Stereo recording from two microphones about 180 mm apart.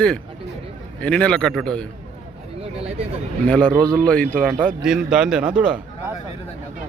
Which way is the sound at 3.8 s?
5° left (ahead or behind).